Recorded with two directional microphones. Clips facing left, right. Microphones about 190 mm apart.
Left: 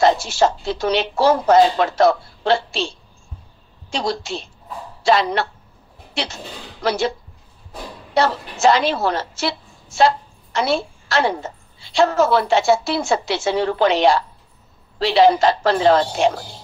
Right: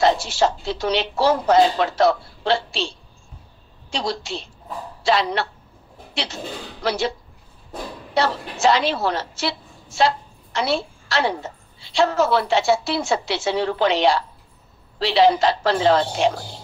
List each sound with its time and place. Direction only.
0.0 s a woman's voice: 45° left (ahead or behind)
3.9 s a woman's voice: 45° left (ahead or behind)
6.8 s a woman's voice: 45° left (ahead or behind)